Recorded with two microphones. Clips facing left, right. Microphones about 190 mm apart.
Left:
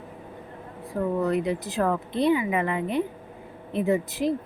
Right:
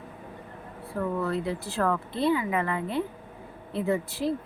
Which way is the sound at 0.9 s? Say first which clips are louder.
Left 4 dB; 20° left (ahead or behind).